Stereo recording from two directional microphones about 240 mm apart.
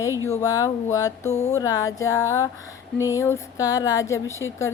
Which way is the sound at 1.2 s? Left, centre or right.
Left.